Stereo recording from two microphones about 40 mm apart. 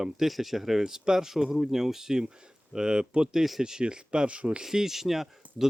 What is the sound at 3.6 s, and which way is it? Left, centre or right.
Speech, centre.